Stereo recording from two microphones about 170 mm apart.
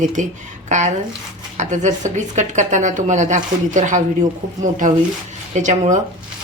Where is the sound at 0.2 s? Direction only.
45° right (ahead or behind).